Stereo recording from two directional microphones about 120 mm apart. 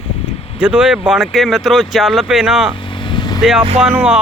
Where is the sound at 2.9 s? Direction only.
40° left (ahead or behind).